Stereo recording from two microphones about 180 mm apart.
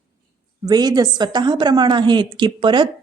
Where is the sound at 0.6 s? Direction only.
20° right (ahead or behind).